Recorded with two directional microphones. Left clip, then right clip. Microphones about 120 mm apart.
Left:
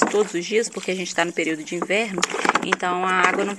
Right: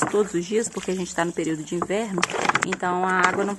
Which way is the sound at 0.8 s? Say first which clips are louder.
Left 3 dB; 40° right (ahead or behind).